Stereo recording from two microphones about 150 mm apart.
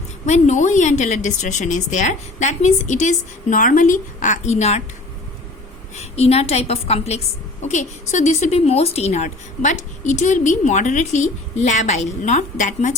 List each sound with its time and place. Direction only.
0.3 s a woman's voice: 50° left (ahead or behind)
6.0 s a woman's voice: 45° left (ahead or behind)